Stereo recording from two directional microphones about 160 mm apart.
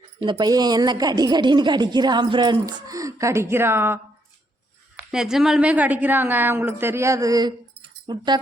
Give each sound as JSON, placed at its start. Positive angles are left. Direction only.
{"t": 0.2, "sound": "a woman's voice", "side_deg": -30}
{"t": 5.1, "sound": "a woman's voice", "side_deg": -5}